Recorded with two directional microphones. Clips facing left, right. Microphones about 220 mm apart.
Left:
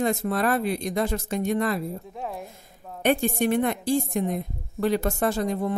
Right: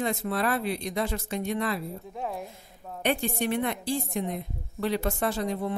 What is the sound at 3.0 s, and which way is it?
A woman's voice, 45° left (ahead or behind).